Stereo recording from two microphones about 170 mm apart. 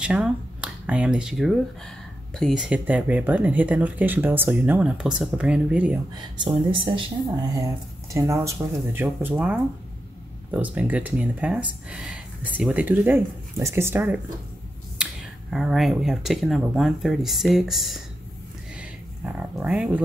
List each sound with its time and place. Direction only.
0.0 s speech: 5° right (ahead or behind)
6.1 s speech: 25° right (ahead or behind)
9.0 s speech: 5° right (ahead or behind)
15.5 s speech: centre (ahead or behind)